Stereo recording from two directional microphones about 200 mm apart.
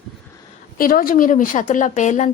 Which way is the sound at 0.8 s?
45° left (ahead or behind).